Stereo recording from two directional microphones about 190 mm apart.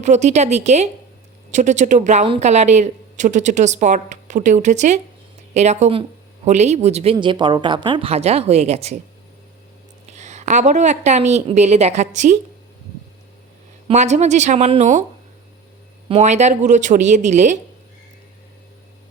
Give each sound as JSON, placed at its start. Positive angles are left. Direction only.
{"t": 0.0, "sound": "a woman's voice", "side_deg": -35}
{"t": 10.1, "sound": "a woman's voice", "side_deg": -35}
{"t": 13.8, "sound": "a woman's voice", "side_deg": -35}
{"t": 16.0, "sound": "a woman's voice", "side_deg": -35}